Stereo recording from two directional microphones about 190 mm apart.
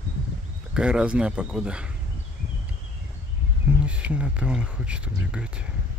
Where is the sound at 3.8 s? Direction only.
5° right (ahead or behind).